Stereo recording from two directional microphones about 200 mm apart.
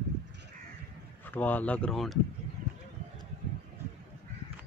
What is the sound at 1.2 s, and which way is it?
Speech, 10° left (ahead or behind).